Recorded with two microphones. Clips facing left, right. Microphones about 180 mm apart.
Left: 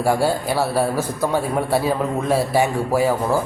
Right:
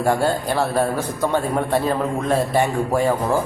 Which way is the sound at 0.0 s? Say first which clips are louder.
Even; 10° left (ahead or behind).